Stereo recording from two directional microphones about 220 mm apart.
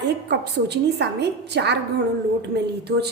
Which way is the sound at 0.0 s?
50° right (ahead or behind).